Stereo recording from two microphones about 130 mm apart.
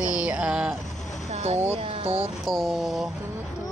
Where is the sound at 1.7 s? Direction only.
55° right (ahead or behind).